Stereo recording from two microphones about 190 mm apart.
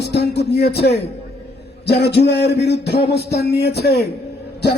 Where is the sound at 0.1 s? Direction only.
60° left (ahead or behind).